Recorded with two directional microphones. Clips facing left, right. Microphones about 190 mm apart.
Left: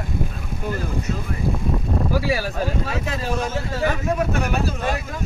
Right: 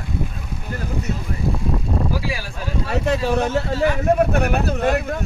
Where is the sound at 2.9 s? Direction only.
65° right (ahead or behind).